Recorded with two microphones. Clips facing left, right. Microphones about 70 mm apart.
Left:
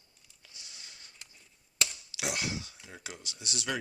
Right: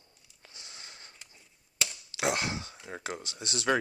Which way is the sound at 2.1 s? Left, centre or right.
Right.